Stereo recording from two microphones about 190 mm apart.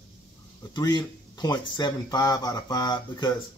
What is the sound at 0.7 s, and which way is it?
Speech, 20° left (ahead or behind).